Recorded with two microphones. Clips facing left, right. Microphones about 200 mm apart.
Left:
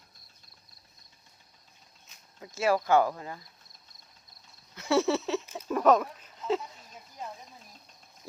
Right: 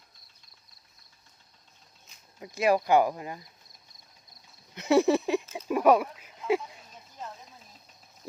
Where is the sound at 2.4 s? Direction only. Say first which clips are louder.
Right 2 dB; 15° right (ahead or behind).